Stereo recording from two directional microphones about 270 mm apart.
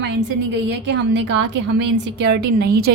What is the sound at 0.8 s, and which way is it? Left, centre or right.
A woman's voice, right.